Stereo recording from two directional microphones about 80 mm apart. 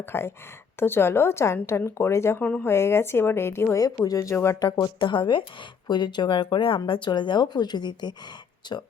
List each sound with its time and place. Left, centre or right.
0.0 s a woman's voice: left
3.8 s speech: left
4.9 s speech: left